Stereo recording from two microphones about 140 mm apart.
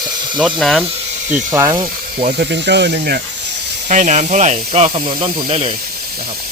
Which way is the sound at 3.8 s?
60° right (ahead or behind).